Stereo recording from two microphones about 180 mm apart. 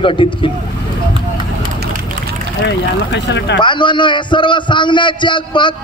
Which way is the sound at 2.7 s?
70° left (ahead or behind).